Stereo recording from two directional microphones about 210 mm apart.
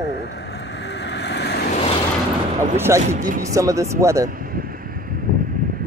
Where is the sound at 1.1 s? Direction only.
55° left (ahead or behind).